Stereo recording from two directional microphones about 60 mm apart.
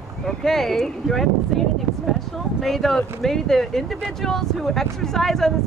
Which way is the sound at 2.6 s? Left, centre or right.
Centre.